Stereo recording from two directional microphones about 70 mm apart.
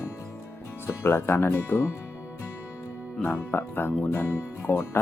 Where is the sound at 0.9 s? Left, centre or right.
Left.